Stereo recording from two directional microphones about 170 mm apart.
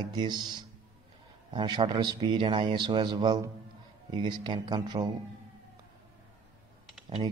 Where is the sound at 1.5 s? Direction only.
30° right (ahead or behind).